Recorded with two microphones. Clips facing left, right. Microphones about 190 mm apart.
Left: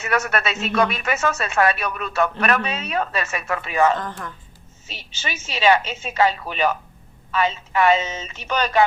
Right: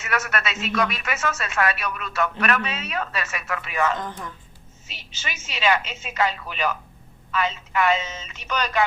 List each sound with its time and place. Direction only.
0.0 s speech: 30° left (ahead or behind)
5.1 s speech: 30° left (ahead or behind)